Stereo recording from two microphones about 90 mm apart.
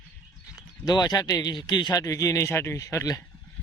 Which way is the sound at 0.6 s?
45° left (ahead or behind).